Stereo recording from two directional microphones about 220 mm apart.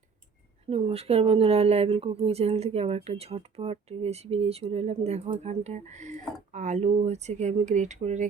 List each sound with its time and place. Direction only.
0.7 s speech: 25° right (ahead or behind)